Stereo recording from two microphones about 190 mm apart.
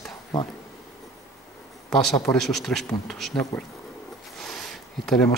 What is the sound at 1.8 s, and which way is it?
Speech, centre (ahead or behind).